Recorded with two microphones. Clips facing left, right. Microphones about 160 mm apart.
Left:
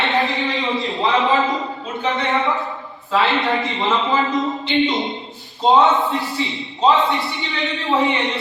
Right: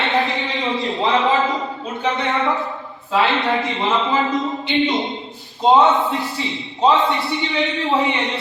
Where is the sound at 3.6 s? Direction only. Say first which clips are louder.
Even; centre (ahead or behind).